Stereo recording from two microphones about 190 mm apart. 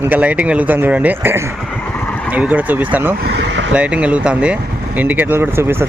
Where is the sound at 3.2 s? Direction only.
60° right (ahead or behind).